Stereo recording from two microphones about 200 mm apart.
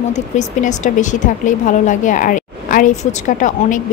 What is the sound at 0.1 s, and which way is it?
Speech, 35° left (ahead or behind).